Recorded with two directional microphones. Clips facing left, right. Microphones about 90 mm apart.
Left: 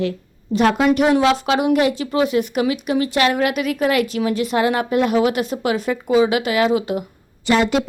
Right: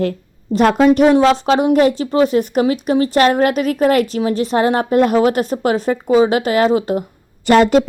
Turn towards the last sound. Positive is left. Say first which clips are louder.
# right 6 dB
turn(degrees=-50)  # may be behind; listen again after turning